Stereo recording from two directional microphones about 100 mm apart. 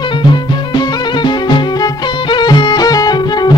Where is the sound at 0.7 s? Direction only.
50° left (ahead or behind).